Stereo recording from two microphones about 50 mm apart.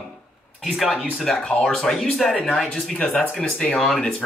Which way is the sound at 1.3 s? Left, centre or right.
Left.